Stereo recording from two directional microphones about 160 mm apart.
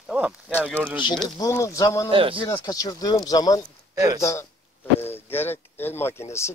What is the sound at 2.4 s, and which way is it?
Speech, 25° left (ahead or behind).